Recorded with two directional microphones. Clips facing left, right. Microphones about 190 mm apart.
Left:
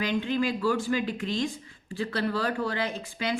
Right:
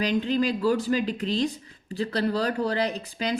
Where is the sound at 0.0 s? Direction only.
40° right (ahead or behind).